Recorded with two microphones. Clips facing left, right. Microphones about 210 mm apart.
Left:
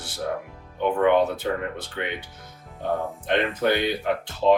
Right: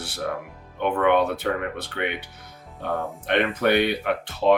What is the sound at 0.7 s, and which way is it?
Speech, 60° right (ahead or behind).